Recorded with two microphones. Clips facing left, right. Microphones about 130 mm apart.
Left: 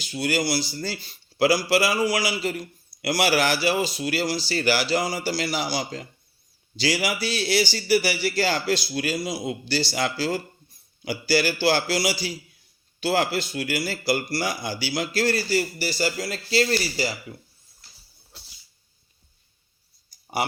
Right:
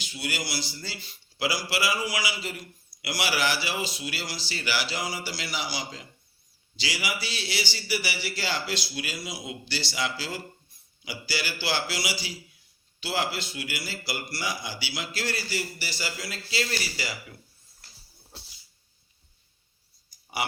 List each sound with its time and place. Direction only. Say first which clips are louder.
0.0 s a man's voice: left 9 dB; 40° left (ahead or behind)